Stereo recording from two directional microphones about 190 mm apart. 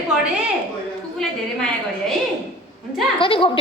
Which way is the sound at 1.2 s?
Centre (ahead or behind).